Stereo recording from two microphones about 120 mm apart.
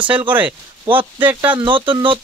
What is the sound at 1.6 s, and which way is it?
Speech, 45° right (ahead or behind).